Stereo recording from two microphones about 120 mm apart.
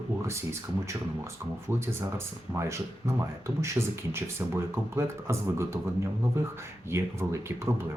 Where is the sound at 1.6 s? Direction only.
20° right (ahead or behind).